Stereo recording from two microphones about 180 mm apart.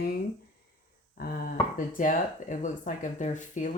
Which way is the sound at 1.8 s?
45° left (ahead or behind).